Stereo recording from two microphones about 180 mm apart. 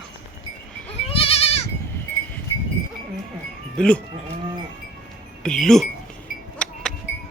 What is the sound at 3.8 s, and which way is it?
Speech, 5° left (ahead or behind).